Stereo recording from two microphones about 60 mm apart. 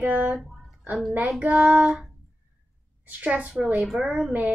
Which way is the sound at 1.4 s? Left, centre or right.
Right.